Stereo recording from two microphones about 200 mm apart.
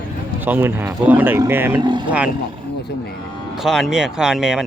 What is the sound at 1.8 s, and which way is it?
Speech, 20° right (ahead or behind).